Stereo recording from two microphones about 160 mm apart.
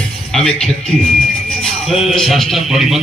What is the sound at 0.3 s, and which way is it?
Music, 5° left (ahead or behind).